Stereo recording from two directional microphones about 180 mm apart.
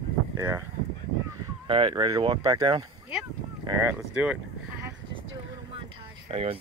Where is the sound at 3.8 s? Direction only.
10° right (ahead or behind).